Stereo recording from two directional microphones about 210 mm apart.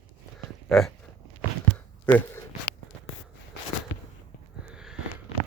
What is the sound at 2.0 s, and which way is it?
Speech, 10° left (ahead or behind).